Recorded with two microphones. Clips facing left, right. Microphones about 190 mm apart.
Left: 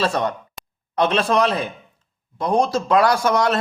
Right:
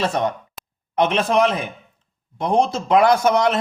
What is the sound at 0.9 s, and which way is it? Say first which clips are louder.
Speech: right 1 dB; 15° right (ahead or behind).